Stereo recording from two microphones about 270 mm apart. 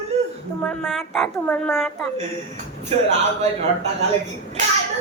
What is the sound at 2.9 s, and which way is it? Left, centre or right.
Speech, right.